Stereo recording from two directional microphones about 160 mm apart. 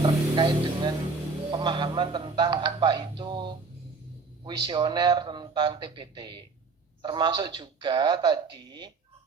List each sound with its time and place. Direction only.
0.0 s music: 30° right (ahead or behind)
1.5 s a man's voice: 30° right (ahead or behind)